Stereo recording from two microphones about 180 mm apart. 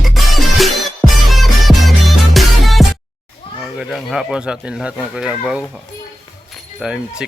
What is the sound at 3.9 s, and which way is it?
Speech, centre (ahead or behind).